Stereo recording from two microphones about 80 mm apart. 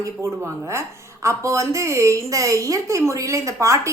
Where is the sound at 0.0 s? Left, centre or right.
Right.